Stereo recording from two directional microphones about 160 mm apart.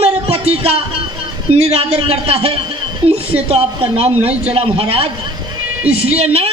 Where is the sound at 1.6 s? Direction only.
40° right (ahead or behind).